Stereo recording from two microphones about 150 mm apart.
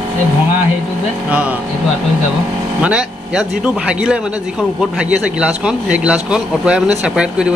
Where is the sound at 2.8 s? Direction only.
5° right (ahead or behind).